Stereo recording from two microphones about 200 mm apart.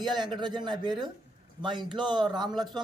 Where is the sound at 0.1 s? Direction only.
20° right (ahead or behind).